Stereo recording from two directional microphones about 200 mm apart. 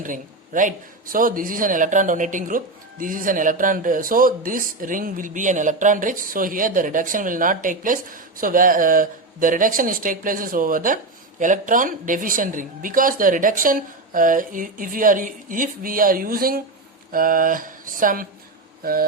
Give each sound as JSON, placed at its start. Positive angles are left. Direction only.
{"t": 0.0, "sound": "a man's voice", "side_deg": -40}